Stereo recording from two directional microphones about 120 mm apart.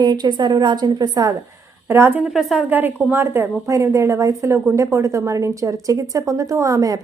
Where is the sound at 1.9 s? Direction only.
20° right (ahead or behind).